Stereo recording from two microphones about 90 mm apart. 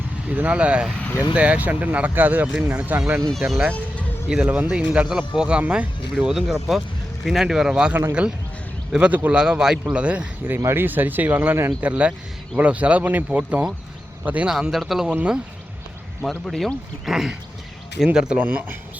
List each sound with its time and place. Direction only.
0.3 s speech: 15° right (ahead or behind)
4.3 s speech: 15° right (ahead or behind)
11.8 s speech: 15° right (ahead or behind)
14.5 s speech: centre (ahead or behind)
15.1 s speech: 15° right (ahead or behind)
16.5 s speech: centre (ahead or behind)
18.3 s speech: 20° right (ahead or behind)